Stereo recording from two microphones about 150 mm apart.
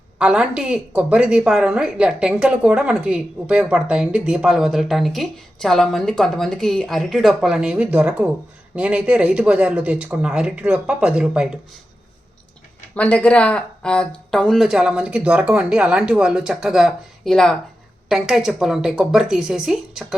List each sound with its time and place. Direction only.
0.2 s a woman's voice: 5° right (ahead or behind)
12.9 s a woman's voice: 10° left (ahead or behind)